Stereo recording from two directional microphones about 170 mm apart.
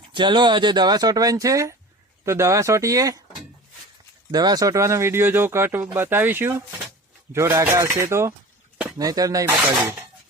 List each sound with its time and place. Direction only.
0.1 s speech: 30° right (ahead or behind)
4.3 s speech: 20° right (ahead or behind)